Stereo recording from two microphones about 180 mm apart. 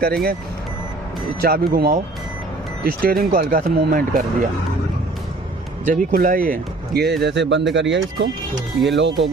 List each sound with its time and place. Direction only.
0.0 s speech: 60° right (ahead or behind)
1.4 s speech: 55° right (ahead or behind)
5.8 s speech: 50° right (ahead or behind); by 9.3 s 85° right